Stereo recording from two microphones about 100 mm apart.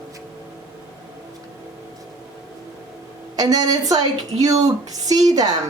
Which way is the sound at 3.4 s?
40° right (ahead or behind).